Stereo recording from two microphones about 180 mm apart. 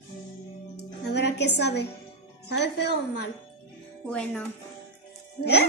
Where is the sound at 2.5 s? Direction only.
70° left (ahead or behind).